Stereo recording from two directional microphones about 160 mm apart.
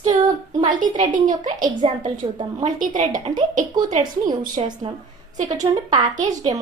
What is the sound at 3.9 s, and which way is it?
Speech, 55° right (ahead or behind).